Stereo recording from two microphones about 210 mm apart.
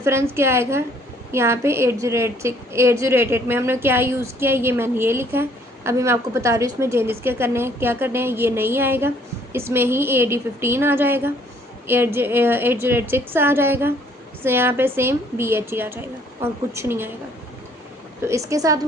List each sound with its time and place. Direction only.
0.0 s a woman's voice: 10° right (ahead or behind)
18.3 s a woman's voice: 15° right (ahead or behind)